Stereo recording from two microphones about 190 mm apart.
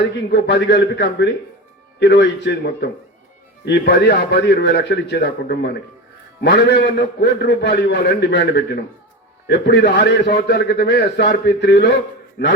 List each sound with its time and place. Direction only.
0.3 s a man's voice: 60° left (ahead or behind)